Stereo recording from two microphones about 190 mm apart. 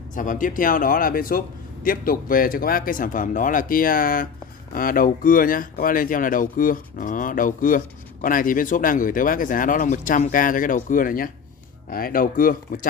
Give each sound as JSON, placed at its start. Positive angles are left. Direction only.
{"t": 0.1, "sound": "speech", "side_deg": 45}